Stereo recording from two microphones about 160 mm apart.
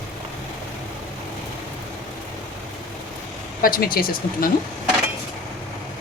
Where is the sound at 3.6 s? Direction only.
65° left (ahead or behind).